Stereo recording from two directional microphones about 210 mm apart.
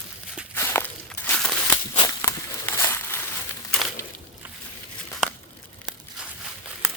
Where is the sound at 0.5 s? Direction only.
10° left (ahead or behind).